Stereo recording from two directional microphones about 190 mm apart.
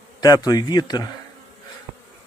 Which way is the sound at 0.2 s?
20° left (ahead or behind).